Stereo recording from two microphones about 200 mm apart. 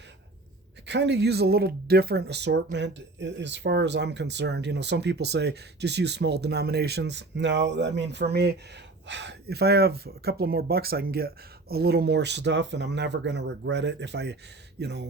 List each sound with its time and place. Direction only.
0.9 s speech: 60° right (ahead or behind)